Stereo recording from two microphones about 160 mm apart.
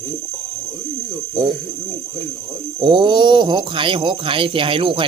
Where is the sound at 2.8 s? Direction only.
30° right (ahead or behind).